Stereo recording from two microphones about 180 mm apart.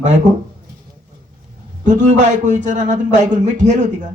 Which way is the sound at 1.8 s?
40° right (ahead or behind).